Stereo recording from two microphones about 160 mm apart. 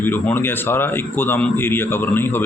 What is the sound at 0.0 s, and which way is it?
A man's voice, 15° left (ahead or behind).